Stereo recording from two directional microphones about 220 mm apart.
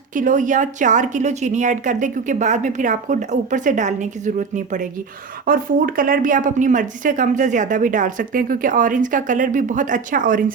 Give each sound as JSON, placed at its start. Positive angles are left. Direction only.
{"t": 0.1, "sound": "speech", "side_deg": -35}